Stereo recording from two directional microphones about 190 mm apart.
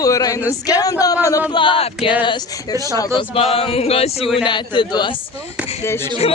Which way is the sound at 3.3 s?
30° left (ahead or behind).